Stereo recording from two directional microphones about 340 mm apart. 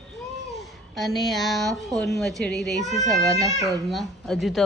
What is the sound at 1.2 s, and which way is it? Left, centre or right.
A woman's voice, centre.